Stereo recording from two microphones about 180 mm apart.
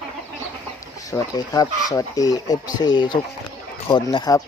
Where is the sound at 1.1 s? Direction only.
20° left (ahead or behind).